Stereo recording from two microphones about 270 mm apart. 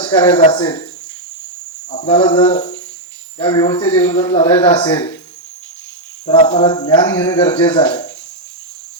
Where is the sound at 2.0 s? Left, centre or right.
Centre.